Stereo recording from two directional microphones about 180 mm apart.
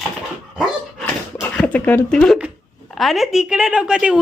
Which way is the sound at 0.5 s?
Centre (ahead or behind).